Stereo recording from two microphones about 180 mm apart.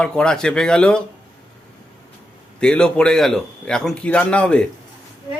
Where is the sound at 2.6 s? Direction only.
5° left (ahead or behind).